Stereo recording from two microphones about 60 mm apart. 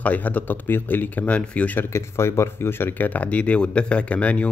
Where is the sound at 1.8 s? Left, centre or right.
Left.